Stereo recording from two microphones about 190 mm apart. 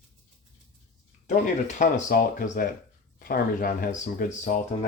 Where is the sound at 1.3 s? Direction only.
40° left (ahead or behind).